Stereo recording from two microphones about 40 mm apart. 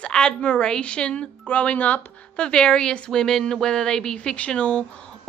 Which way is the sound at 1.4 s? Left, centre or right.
Left.